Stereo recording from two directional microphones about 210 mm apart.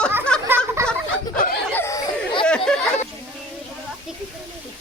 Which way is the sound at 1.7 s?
15° left (ahead or behind).